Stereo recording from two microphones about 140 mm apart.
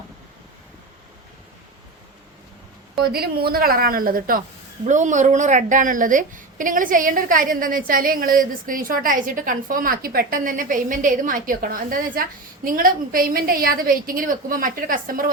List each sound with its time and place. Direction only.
3.0 s a woman's voice: 90° right
4.9 s a woman's voice: 60° right (ahead or behind); by 15.3 s 80° right